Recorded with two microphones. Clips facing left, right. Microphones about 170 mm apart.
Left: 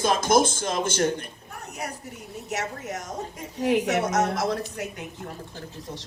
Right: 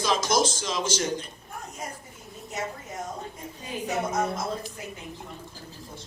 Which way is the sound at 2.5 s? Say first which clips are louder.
Left 3 dB; 75° left (ahead or behind).